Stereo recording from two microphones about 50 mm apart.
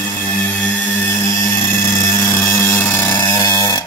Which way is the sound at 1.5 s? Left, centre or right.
Left.